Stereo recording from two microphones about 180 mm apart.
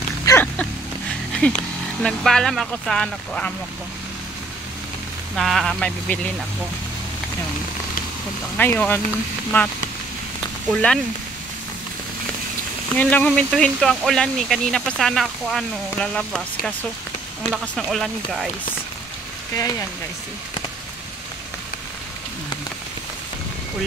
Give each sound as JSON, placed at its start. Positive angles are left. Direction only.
{"t": 0.2, "sound": "a sound", "side_deg": 20}
{"t": 1.4, "sound": "speech", "side_deg": 5}
{"t": 5.3, "sound": "speech", "side_deg": 0}
{"t": 8.5, "sound": "speech", "side_deg": 10}
{"t": 12.9, "sound": "speech", "side_deg": 5}